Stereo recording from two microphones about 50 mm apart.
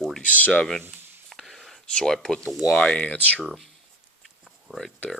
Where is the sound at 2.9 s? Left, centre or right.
Left.